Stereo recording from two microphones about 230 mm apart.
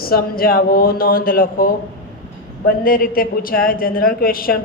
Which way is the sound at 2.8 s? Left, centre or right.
Left.